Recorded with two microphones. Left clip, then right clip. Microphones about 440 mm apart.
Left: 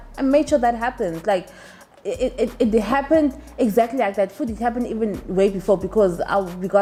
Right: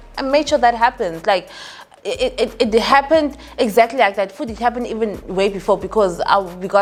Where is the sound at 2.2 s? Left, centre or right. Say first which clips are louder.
Right 3 dB; right.